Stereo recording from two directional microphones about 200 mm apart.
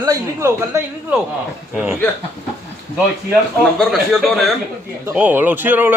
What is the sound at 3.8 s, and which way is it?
A man's voice, centre (ahead or behind).